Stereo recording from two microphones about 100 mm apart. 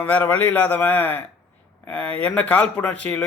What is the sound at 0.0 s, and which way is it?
A man's voice, 15° left (ahead or behind).